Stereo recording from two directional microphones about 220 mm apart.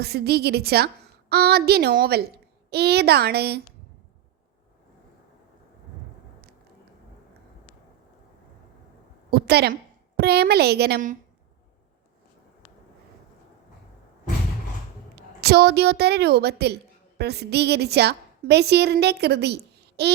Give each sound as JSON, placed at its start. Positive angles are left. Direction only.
{"t": 0.0, "sound": "a woman's voice", "side_deg": -45}
{"t": 9.3, "sound": "a woman's voice", "side_deg": -45}
{"t": 15.1, "sound": "a woman's voice", "side_deg": -50}